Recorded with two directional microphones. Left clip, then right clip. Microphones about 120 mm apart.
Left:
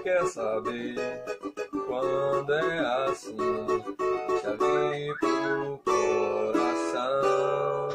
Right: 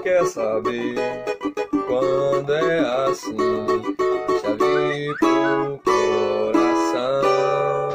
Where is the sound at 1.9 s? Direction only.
15° right (ahead or behind).